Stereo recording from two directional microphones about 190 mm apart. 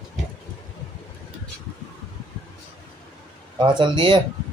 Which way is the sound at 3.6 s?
25° right (ahead or behind).